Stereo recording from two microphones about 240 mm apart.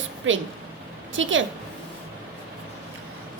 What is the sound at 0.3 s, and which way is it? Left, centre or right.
A woman's voice, right.